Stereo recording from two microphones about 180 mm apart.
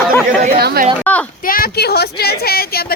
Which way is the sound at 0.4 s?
60° right (ahead or behind).